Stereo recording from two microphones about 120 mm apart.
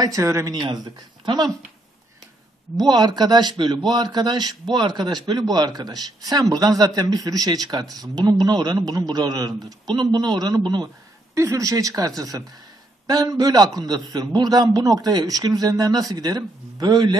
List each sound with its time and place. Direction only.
0.0 s speech: 25° right (ahead or behind)
0.5 s a man's voice: 35° right (ahead or behind)
2.9 s a man's voice: 35° right (ahead or behind)
11.3 s a man's voice: 25° right (ahead or behind)